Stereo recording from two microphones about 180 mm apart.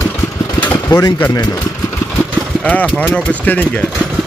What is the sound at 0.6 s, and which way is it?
Speech, 15° left (ahead or behind).